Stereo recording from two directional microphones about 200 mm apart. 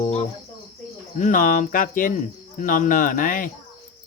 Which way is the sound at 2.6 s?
40° left (ahead or behind).